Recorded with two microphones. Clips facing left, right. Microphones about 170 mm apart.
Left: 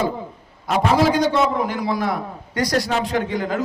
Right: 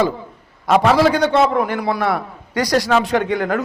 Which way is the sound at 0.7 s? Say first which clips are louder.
Right 4 dB; 80° right.